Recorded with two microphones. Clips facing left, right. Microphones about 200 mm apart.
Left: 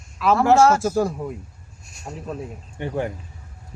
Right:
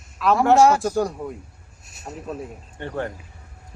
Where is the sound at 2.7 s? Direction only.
10° left (ahead or behind).